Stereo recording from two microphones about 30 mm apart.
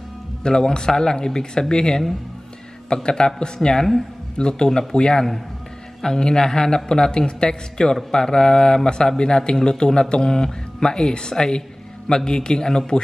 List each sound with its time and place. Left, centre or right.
0.4 s a man's voice: left
3.7 s speech: centre
4.4 s a man's voice: left